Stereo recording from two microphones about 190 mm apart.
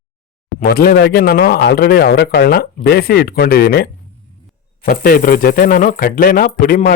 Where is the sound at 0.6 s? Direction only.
55° left (ahead or behind).